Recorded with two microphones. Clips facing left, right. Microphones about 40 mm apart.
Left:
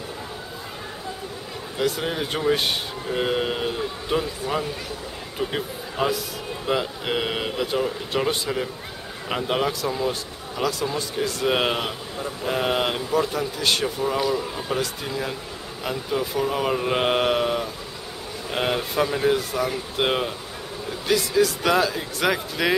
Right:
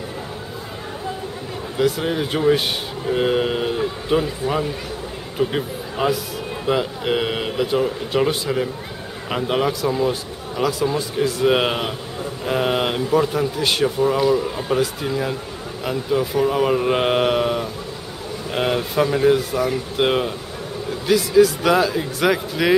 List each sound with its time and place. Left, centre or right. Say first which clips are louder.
1.8 s a man's voice: right 5 dB; centre